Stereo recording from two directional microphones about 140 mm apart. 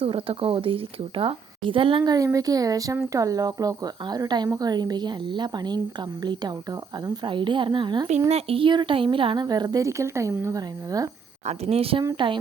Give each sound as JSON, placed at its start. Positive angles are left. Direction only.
{"t": 0.0, "sound": "a woman's voice", "side_deg": -40}
{"t": 11.4, "sound": "a woman's voice", "side_deg": -45}